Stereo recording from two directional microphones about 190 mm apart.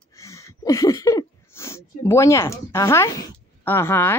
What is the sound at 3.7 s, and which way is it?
Speech, 10° left (ahead or behind).